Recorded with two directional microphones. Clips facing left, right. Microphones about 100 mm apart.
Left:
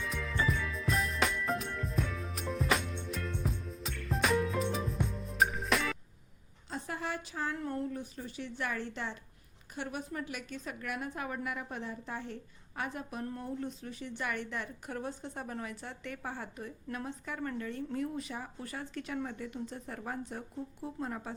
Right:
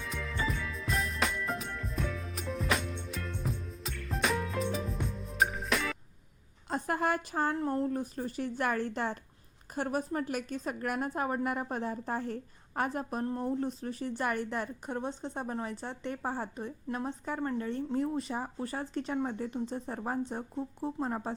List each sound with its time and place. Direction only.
0.0 s music: centre (ahead or behind)
6.7 s a sound: 50° right (ahead or behind)
7.5 s a woman's voice: 35° right (ahead or behind)
14.8 s a woman's voice: 25° right (ahead or behind)